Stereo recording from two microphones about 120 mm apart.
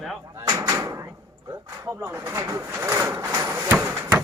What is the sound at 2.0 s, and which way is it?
Speech, 25° right (ahead or behind).